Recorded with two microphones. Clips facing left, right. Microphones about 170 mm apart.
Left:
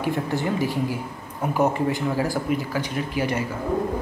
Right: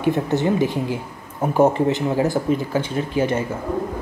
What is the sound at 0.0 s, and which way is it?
Speech, 20° right (ahead or behind).